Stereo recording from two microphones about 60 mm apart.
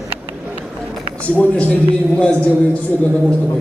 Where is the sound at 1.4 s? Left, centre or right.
Left.